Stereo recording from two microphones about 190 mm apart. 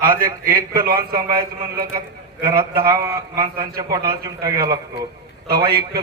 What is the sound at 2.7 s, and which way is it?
Speech, 15° right (ahead or behind).